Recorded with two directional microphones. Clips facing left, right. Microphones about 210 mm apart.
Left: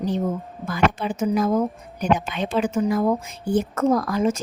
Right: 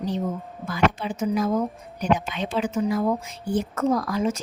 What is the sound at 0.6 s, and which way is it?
Speech, 50° left (ahead or behind).